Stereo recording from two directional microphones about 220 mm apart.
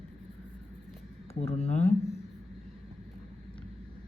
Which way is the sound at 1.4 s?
30° left (ahead or behind).